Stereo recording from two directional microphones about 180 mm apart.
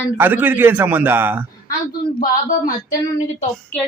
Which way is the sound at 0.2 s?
10° right (ahead or behind).